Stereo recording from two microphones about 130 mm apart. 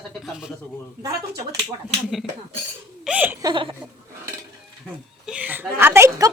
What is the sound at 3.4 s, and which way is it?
Laughter, 40° right (ahead or behind).